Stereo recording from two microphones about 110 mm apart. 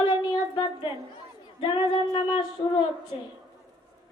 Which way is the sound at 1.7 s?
45° left (ahead or behind).